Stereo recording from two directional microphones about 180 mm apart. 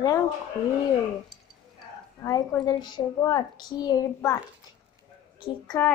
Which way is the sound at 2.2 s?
20° left (ahead or behind).